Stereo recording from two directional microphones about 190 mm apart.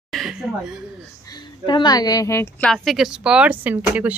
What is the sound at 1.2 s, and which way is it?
A woman's voice, 20° left (ahead or behind).